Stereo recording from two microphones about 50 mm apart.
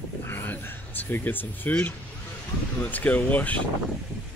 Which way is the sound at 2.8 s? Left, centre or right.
Left.